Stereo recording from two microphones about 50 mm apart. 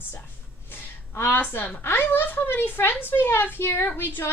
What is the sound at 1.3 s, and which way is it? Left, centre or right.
A woman's voice, left.